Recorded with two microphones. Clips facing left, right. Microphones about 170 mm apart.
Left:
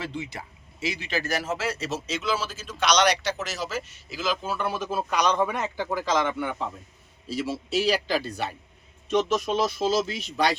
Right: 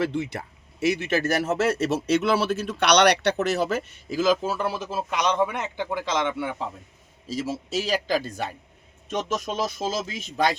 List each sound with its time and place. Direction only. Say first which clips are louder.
0.0 s speech: right 7 dB; 60° right (ahead or behind); by 6.7 s 30° right (ahead or behind)
7.3 s speech: even; 40° right (ahead or behind)